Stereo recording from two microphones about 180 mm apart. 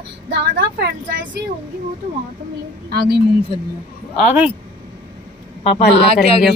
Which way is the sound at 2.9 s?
60° right (ahead or behind).